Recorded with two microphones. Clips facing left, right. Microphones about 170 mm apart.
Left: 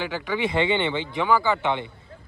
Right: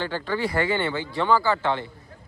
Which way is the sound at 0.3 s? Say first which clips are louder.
Left 2 dB; 20° left (ahead or behind).